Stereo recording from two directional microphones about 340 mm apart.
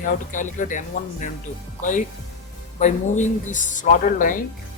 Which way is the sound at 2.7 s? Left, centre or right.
Left.